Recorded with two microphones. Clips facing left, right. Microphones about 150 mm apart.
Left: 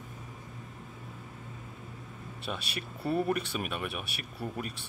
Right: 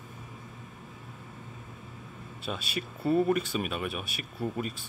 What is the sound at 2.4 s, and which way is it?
Speech, centre (ahead or behind).